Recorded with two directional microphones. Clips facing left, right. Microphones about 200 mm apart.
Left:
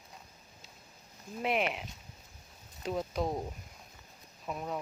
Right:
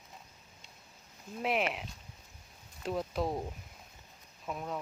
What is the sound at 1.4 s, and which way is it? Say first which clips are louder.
Speech: left 1 dB; centre (ahead or behind).